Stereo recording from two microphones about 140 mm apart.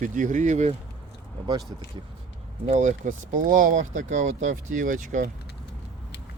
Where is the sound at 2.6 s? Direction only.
55° right (ahead or behind).